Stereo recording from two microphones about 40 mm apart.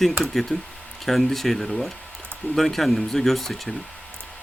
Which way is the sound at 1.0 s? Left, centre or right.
Centre.